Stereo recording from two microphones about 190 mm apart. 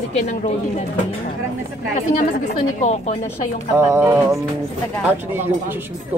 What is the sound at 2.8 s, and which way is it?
Speech, 35° left (ahead or behind).